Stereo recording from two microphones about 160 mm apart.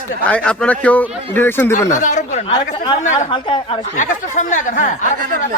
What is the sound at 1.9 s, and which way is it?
Speech, 50° left (ahead or behind).